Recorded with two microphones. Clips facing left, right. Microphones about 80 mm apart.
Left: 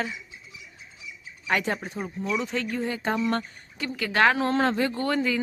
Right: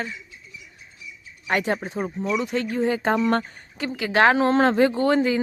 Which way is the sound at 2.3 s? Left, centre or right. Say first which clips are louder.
Right 3 dB; centre.